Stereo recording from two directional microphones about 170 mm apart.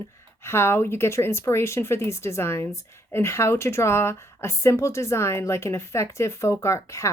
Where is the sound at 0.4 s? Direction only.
15° left (ahead or behind).